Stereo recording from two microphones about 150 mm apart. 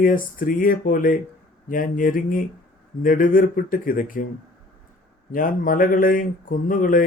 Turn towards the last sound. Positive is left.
turn(degrees=65)  # may be behind; listen again after turning